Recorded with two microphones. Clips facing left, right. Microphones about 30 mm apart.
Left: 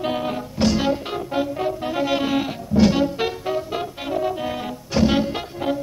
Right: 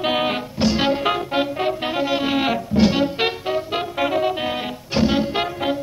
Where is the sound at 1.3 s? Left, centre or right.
Right.